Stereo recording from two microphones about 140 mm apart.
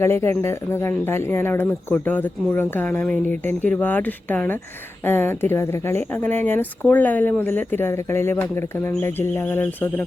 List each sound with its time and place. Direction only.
0.0 s speech: 15° left (ahead or behind)